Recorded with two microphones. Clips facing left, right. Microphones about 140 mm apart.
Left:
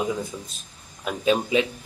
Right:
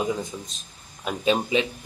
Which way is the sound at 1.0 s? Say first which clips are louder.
Left 1 dB; 5° left (ahead or behind).